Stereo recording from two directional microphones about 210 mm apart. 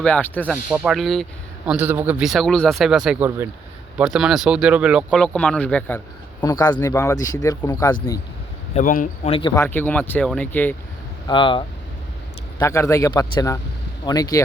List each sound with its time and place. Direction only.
0.0 s speech: 5° left (ahead or behind)
0.5 s speech: 5° right (ahead or behind)
6.4 s speech: 20° left (ahead or behind)
8.7 s speech: 40° left (ahead or behind)
9.6 s speech: 10° left (ahead or behind)
11.3 s speech: 25° left (ahead or behind)